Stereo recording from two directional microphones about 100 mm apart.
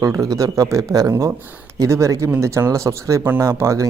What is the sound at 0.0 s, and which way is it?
Speech, 35° right (ahead or behind).